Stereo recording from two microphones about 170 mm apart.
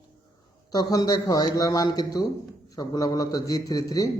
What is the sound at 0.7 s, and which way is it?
A man's voice, 25° left (ahead or behind).